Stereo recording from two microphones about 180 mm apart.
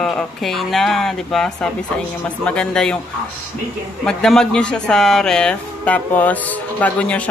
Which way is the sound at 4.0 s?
5° left (ahead or behind).